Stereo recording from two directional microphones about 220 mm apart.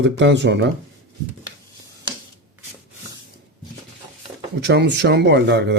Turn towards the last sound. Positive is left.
turn(degrees=-50)  # may be behind; listen again after turning